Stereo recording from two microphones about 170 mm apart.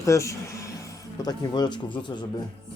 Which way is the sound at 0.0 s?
20° left (ahead or behind).